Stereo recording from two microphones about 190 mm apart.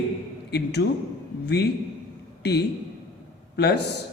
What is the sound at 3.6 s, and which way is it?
Speech, 60° left (ahead or behind).